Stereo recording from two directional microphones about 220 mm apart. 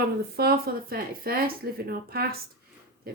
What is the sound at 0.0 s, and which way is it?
Speech, 45° right (ahead or behind).